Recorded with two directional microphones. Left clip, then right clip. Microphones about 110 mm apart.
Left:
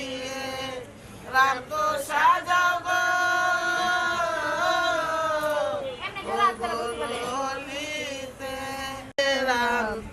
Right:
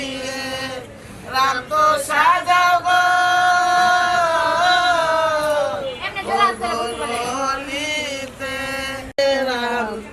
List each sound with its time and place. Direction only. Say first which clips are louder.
1.3 s female singing: right 4 dB; 10° left (ahead or behind)
6.3 s chant: right 6 dB; 15° left (ahead or behind)
9.1 s a sound: right 5 dB; 40° left (ahead or behind)